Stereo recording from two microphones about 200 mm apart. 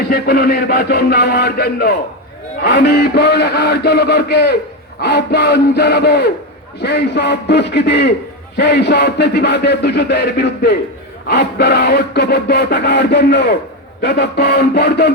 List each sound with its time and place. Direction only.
0.0 s a man's voice: 50° left (ahead or behind)
2.6 s music: 55° left (ahead or behind)